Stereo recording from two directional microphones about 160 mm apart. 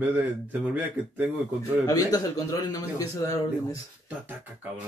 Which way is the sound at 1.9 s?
20° left (ahead or behind).